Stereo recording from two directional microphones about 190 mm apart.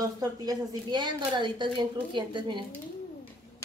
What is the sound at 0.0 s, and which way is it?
Speech, 20° right (ahead or behind).